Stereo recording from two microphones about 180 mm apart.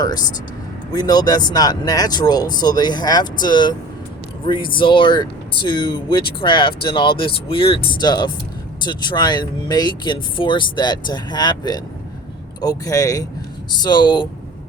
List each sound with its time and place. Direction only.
0.9 s speech: 20° left (ahead or behind)